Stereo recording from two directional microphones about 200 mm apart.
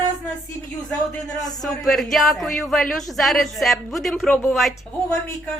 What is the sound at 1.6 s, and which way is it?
Speech, centre (ahead or behind).